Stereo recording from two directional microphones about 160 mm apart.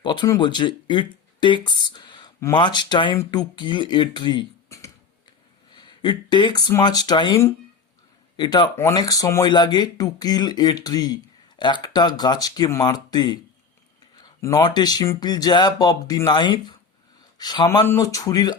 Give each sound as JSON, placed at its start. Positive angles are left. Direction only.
{"t": 0.0, "sound": "speech", "side_deg": 30}